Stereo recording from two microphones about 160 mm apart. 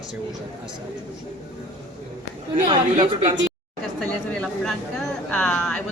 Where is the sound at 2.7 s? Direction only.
25° right (ahead or behind).